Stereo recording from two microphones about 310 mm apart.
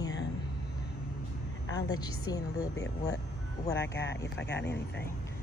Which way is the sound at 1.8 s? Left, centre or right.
Centre.